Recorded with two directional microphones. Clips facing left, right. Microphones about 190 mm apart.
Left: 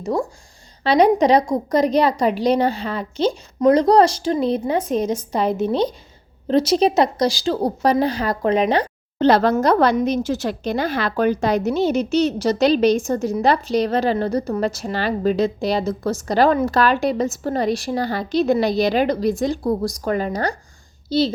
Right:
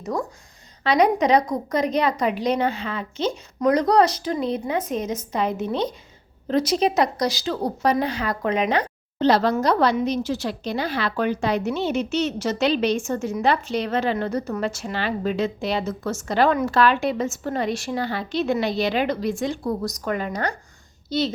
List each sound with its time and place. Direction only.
0.0 s a woman's voice: 30° left (ahead or behind)
9.1 s a woman's voice: 50° left (ahead or behind); by 21.2 s 30° left (ahead or behind)